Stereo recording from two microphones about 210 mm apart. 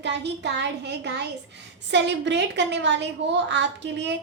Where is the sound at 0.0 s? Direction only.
55° right (ahead or behind).